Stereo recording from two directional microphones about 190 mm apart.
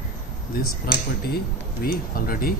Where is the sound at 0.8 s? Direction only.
55° left (ahead or behind).